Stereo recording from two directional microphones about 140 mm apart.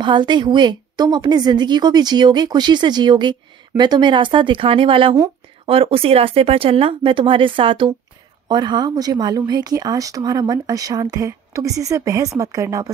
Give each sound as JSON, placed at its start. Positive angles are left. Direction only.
{"t": 0.0, "sound": "a woman's voice", "side_deg": -35}